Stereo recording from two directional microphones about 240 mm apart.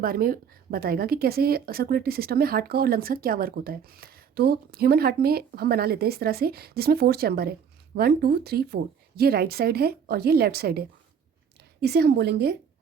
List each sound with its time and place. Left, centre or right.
0.0 s a woman's voice: right